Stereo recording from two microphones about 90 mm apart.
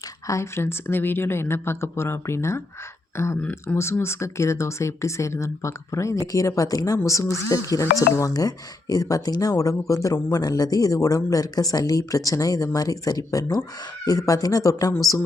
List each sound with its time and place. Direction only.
0.3 s a woman's voice: 30° left (ahead or behind)